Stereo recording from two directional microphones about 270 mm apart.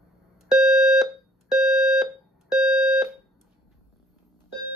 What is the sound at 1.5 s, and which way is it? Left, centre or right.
Alarm, centre.